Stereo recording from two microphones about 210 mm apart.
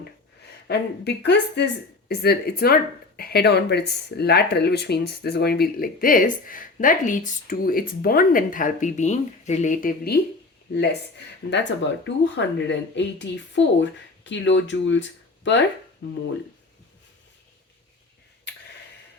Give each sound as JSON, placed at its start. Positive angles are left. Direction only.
{"t": 0.7, "sound": "speech", "side_deg": 50}